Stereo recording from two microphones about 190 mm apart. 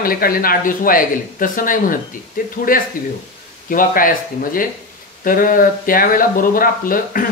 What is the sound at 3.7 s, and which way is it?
Speech, 45° left (ahead or behind).